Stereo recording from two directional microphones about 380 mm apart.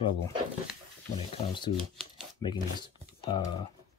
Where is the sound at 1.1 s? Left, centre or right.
Centre.